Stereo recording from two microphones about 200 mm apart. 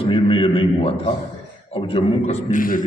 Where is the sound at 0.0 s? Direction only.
30° left (ahead or behind).